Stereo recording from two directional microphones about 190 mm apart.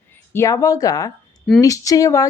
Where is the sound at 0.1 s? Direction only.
15° left (ahead or behind).